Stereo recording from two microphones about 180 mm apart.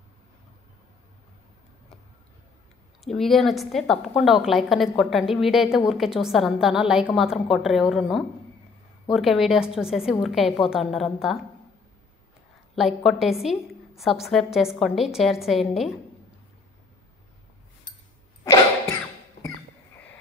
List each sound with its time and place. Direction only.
3.1 s a woman's voice: centre (ahead or behind)
12.7 s a woman's voice: centre (ahead or behind)
18.4 s cough: 20° left (ahead or behind)